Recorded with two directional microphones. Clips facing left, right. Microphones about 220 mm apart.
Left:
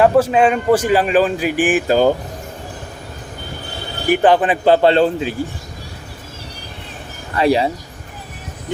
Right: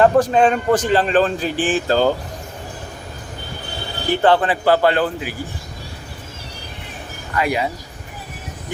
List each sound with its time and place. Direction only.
0.0 s a man's voice: 5° left (ahead or behind)
4.1 s a man's voice: 15° left (ahead or behind)
7.3 s a man's voice: 30° left (ahead or behind)